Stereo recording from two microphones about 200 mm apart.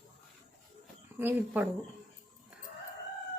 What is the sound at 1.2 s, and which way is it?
Speech, 10° right (ahead or behind).